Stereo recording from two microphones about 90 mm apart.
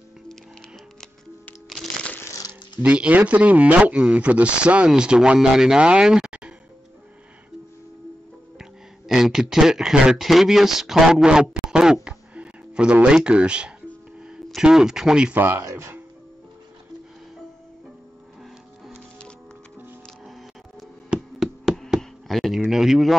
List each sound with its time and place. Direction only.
2.8 s speech: 15° right (ahead or behind)
8.5 s speech: 5° right (ahead or behind)
15.3 s speech: 20° right (ahead or behind)
21.1 s hammer: 5° right (ahead or behind)
21.9 s a sound: centre (ahead or behind)